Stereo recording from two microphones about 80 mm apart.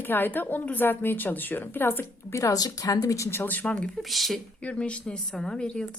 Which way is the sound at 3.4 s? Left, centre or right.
Left.